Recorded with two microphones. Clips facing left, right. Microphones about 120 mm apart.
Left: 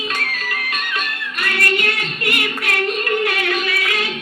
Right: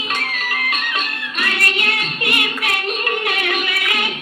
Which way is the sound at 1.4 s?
20° right (ahead or behind).